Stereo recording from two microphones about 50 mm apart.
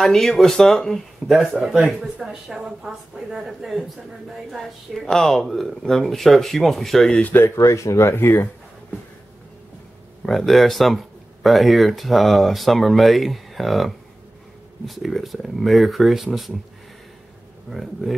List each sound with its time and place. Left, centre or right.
0.0 s speech: centre
2.1 s a woman's voice: centre
7.5 s speech: left
8.1 s speech: left
10.2 s speech: centre
17.6 s speech: centre